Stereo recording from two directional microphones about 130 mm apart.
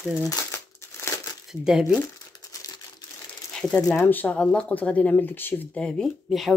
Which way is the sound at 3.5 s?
10° left (ahead or behind).